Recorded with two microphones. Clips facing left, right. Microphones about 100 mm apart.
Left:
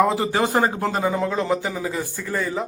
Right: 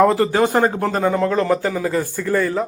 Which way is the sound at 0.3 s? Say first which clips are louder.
Right 4 dB; 20° left (ahead or behind).